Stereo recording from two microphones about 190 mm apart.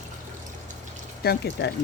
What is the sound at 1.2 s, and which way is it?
Speech, 60° left (ahead or behind).